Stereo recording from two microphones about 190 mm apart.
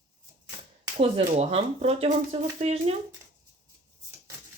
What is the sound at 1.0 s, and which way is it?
Speech, 35° right (ahead or behind).